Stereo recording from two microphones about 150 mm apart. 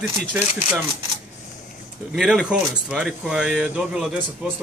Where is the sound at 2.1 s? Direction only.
Centre (ahead or behind).